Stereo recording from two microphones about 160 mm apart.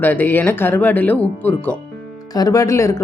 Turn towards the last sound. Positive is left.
turn(degrees=20)  # may be behind; listen again after turning